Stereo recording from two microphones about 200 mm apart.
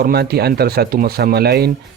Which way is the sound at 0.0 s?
50° right (ahead or behind).